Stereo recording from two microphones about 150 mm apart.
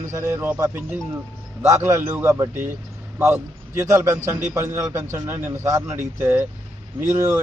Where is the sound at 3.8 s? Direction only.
20° right (ahead or behind).